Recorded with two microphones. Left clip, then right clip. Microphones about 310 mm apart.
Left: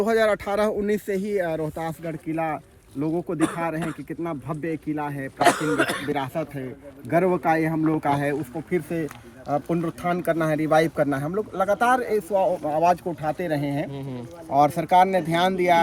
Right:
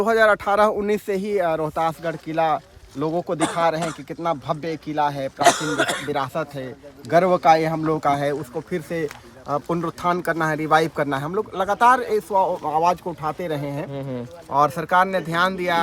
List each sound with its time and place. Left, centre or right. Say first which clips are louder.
0.0 s speech: right 4 dB; centre
2.0 s speech: right 6 dB; centre
14.6 s speech: even; right